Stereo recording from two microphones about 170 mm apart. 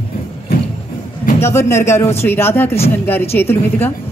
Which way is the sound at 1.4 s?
15° left (ahead or behind).